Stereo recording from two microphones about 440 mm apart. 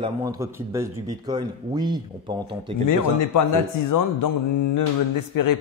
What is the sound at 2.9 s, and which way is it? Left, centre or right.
A man's voice, left.